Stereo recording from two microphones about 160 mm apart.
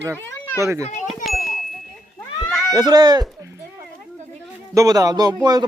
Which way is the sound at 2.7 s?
25° right (ahead or behind).